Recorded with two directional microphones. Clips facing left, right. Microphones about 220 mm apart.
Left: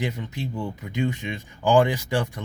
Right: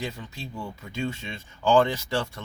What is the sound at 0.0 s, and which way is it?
Speech, 20° left (ahead or behind).